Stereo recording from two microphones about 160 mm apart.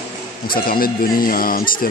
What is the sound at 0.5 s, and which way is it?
Speech, 65° left (ahead or behind).